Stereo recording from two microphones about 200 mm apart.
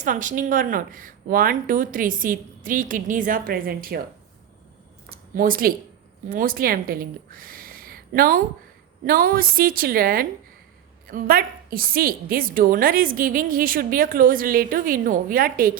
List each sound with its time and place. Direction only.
0.0 s a woman's voice: 40° right (ahead or behind)
5.0 s a sound: 45° right (ahead or behind)
6.2 s a woman's voice: 45° right (ahead or behind)